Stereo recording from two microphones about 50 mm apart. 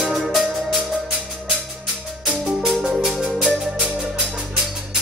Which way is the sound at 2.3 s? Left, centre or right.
Centre.